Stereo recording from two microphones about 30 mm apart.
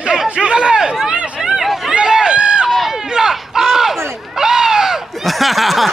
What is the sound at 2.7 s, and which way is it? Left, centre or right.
Run, centre.